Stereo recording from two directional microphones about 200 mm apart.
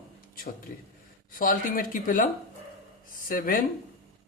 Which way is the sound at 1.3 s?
45° left (ahead or behind).